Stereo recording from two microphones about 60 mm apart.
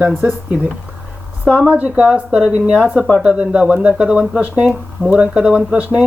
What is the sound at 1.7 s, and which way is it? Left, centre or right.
Speech, right.